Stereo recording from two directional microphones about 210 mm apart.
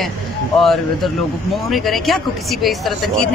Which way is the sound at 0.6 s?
Centre (ahead or behind).